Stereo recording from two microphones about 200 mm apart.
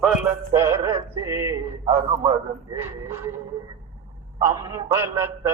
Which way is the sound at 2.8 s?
10° right (ahead or behind).